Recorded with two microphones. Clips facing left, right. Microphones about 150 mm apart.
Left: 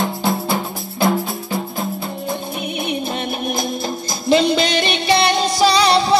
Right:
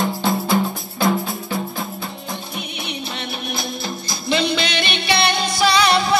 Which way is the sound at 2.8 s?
50° left (ahead or behind).